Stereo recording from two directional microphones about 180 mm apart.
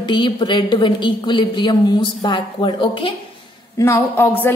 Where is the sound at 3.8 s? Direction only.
15° left (ahead or behind).